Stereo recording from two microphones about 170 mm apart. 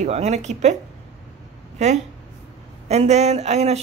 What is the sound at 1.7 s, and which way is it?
A woman's voice, 40° right (ahead or behind).